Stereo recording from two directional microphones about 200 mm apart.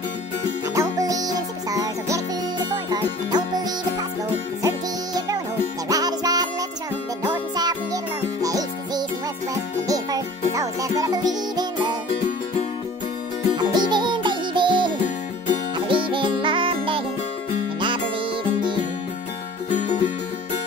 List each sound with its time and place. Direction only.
0.7 s music: 15° right (ahead or behind)
7.5 s music: 20° right (ahead or behind)
13.7 s music: 20° right (ahead or behind)
15.9 s music: 25° right (ahead or behind)